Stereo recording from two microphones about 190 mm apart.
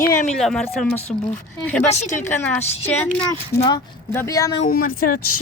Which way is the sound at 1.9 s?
35° left (ahead or behind).